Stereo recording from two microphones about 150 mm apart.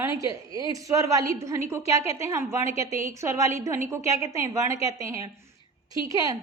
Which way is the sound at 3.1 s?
20° right (ahead or behind).